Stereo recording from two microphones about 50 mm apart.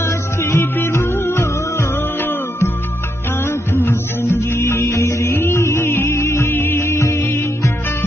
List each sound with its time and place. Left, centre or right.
0.0 s music: left